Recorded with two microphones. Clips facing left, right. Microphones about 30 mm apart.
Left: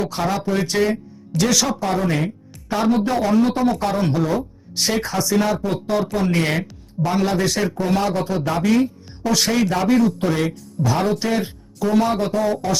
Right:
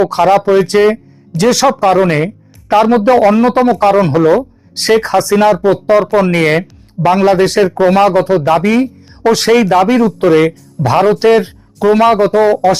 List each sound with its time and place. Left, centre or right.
0.0 s speech: right
1.8 s speech: right
4.4 s speech: right
7.8 s speech: right
10.2 s speech: right